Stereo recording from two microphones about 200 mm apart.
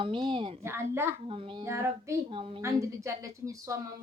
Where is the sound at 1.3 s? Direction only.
25° right (ahead or behind).